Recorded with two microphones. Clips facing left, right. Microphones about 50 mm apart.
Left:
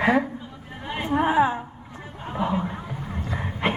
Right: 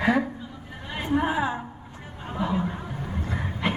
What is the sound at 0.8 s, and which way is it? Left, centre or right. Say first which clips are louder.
Chatter: left 2 dB; left.